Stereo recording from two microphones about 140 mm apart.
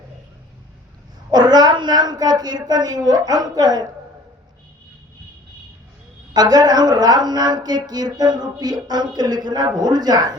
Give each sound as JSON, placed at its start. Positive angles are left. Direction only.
{"t": 1.3, "sound": "speech", "side_deg": -30}
{"t": 6.3, "sound": "speech", "side_deg": -30}